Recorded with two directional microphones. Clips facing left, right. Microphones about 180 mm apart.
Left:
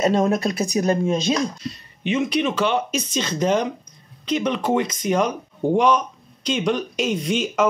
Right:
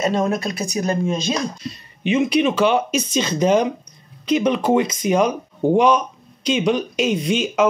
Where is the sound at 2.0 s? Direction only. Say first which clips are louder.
Right 4 dB; 10° right (ahead or behind).